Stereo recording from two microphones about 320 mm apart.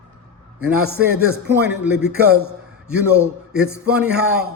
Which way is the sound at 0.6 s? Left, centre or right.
Right.